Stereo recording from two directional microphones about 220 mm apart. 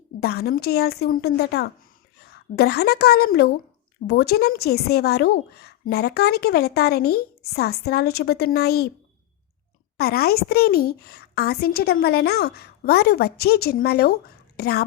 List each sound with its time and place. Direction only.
0.2 s a woman's voice: 45° left (ahead or behind)
10.0 s a woman's voice: 45° left (ahead or behind)